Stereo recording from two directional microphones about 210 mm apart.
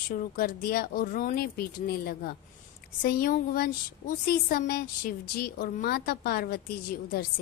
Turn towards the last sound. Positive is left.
turn(degrees=45)  # may be behind; listen again after turning